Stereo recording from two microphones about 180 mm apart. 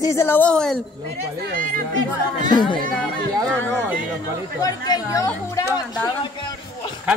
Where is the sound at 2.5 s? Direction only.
25° left (ahead or behind).